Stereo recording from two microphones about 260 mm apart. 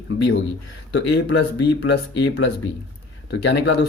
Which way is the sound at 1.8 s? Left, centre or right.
Left.